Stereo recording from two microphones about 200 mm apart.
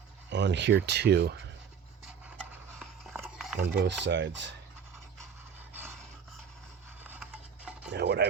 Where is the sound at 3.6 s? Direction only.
60° right (ahead or behind).